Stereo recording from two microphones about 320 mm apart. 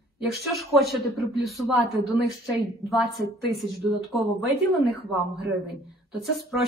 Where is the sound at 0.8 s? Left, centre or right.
Centre.